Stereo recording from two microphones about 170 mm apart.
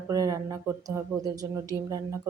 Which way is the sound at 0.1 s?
20° right (ahead or behind).